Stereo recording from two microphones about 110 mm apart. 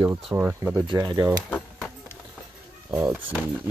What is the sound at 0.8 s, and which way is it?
Speech, 40° right (ahead or behind).